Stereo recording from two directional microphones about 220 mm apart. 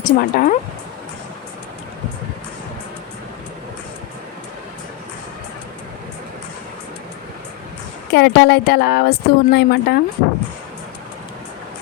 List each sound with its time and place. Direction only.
0.0 s speech: 40° left (ahead or behind)
8.1 s speech: 50° left (ahead or behind)